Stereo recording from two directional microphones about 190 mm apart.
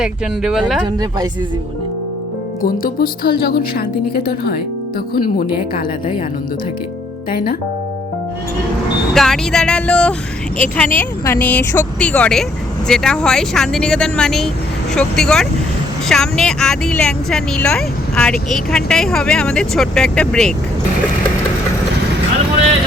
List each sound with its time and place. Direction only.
0.0 s speech: 5° right (ahead or behind)
2.6 s speech: 50° left (ahead or behind)
7.3 s speech: 50° left (ahead or behind)
9.1 s speech: centre (ahead or behind)